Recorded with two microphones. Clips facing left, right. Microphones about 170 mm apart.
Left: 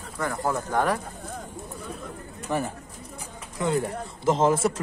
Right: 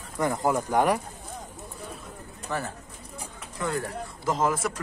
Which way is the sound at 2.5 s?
15° left (ahead or behind).